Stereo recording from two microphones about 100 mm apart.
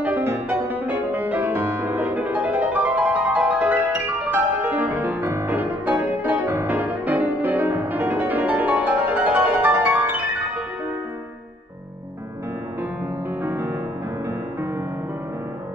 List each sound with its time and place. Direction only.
0.5 s music: 20° right (ahead or behind)
6.4 s music: 30° right (ahead or behind)
6.7 s music: 15° right (ahead or behind)
13.4 s music: 20° right (ahead or behind)